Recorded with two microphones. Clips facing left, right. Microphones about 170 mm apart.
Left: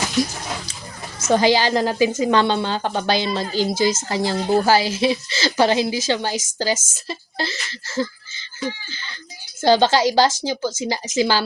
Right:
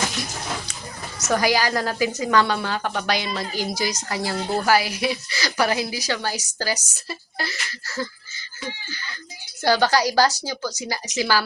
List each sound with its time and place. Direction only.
1.3 s speech: 25° left (ahead or behind)